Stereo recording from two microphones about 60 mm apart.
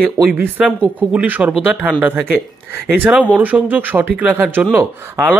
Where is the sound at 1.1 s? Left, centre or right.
Right.